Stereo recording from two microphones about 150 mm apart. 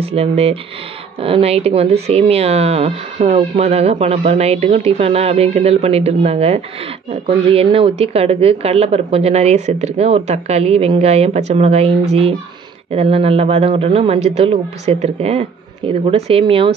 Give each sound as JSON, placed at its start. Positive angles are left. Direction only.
{"t": 0.0, "sound": "speech", "side_deg": -40}